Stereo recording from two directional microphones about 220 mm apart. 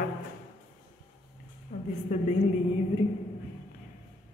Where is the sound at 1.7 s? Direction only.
40° left (ahead or behind).